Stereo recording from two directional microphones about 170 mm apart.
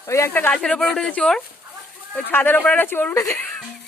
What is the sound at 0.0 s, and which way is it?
Speech, 15° left (ahead or behind).